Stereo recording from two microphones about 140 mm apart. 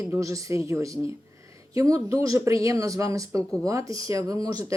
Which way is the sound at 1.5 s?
25° right (ahead or behind).